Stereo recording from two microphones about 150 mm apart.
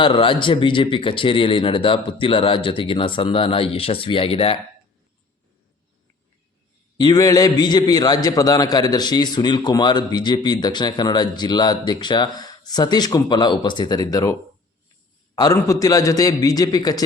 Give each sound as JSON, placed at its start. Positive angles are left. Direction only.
{"t": 0.0, "sound": "speech", "side_deg": 35}
{"t": 6.9, "sound": "a man's voice", "side_deg": 25}
{"t": 15.4, "sound": "a man's voice", "side_deg": 25}